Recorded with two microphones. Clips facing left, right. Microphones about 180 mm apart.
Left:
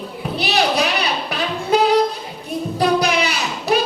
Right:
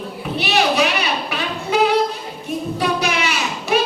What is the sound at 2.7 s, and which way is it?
Music, 35° left (ahead or behind).